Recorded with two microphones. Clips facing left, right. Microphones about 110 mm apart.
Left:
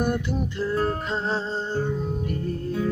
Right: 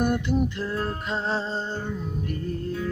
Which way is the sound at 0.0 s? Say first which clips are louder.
Right 2 dB; 5° right (ahead or behind).